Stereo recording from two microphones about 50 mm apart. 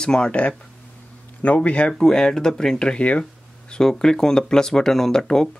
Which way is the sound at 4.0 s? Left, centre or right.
Centre.